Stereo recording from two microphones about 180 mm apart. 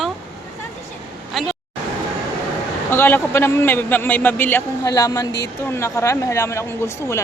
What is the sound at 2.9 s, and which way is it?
A man's voice, 10° left (ahead or behind).